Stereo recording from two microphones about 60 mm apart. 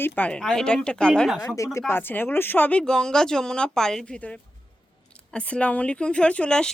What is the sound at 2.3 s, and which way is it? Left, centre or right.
Speech, left.